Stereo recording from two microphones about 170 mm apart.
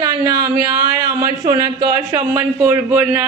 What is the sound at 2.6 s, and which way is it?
Speech, 10° right (ahead or behind).